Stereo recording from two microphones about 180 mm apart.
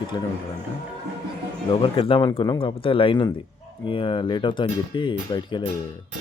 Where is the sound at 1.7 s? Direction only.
30° left (ahead or behind).